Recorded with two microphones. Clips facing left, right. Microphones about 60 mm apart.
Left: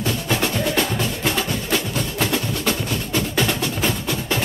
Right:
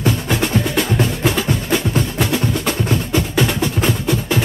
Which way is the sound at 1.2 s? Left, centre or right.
Centre.